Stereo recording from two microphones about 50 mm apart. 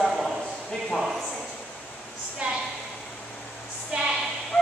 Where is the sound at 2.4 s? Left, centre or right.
Right.